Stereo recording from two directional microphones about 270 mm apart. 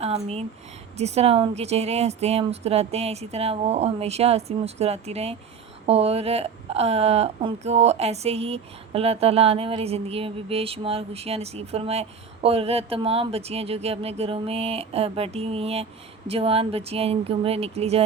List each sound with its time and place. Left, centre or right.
0.0 s speech: right